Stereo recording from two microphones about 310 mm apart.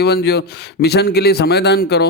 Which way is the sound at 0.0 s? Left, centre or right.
Left.